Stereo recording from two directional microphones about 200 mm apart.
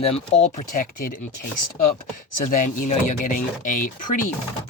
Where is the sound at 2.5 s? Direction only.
40° left (ahead or behind).